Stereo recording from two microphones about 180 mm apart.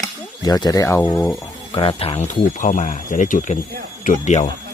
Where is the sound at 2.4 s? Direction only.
45° left (ahead or behind).